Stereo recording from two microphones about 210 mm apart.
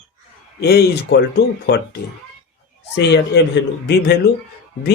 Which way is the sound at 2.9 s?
55° left (ahead or behind).